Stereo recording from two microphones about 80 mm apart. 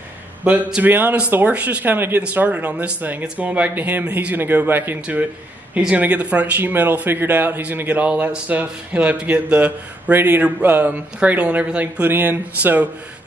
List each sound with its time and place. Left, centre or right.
0.8 s speech: right
5.8 s speech: centre